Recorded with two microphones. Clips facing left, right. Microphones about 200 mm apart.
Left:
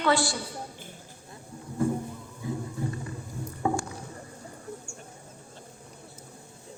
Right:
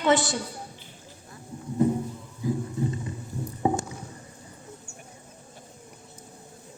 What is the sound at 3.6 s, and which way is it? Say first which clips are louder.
Rowboat: right 3 dB; 20° right (ahead or behind).